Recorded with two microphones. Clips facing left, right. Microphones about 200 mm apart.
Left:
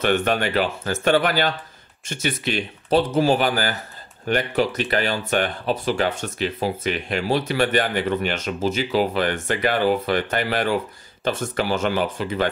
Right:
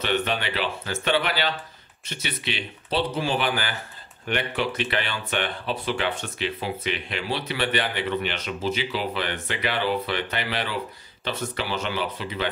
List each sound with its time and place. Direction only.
0.0 s speech: 50° left (ahead or behind)